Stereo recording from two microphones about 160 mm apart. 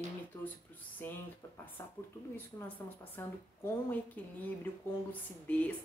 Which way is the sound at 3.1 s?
15° left (ahead or behind).